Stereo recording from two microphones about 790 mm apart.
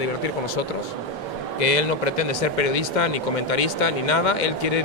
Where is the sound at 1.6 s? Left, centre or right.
Left.